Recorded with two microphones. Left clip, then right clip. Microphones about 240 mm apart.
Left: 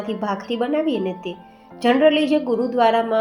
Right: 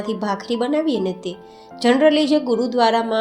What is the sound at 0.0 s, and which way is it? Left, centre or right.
A woman's voice, right.